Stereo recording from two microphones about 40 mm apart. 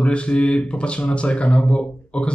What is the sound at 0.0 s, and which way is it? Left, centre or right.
Speech, left.